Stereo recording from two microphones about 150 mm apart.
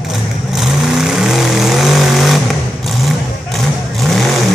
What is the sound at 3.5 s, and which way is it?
Vehicle, centre (ahead or behind).